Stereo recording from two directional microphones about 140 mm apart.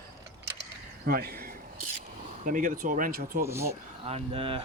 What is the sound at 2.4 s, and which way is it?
Speech, 70° right (ahead or behind).